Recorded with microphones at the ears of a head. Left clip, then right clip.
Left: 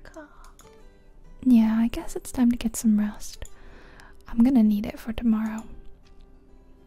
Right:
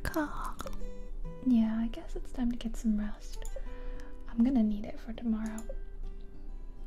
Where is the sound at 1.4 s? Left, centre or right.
Left.